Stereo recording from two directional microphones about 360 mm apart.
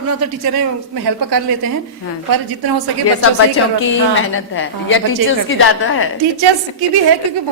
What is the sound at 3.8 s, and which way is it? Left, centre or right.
A woman's voice, left.